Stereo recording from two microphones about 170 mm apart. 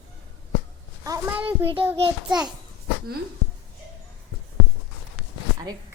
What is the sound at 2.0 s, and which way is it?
Speech, 30° right (ahead or behind).